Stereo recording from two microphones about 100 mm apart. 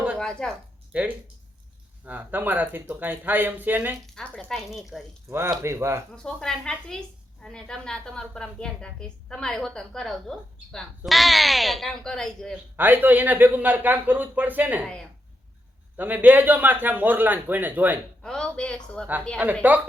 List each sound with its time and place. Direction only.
0.2 s speech: 5° left (ahead or behind)
0.9 s speech: 15° right (ahead or behind)
4.0 s a woman's voice: 5° left (ahead or behind)
5.5 s a man's voice: 30° right (ahead or behind)
6.1 s a woman's voice: 5° left (ahead or behind)
12.7 s a man's voice: 20° right (ahead or behind)
16.0 s speech: 20° right (ahead or behind)
18.2 s speech: 10° left (ahead or behind)
19.4 s a man's voice: 20° right (ahead or behind)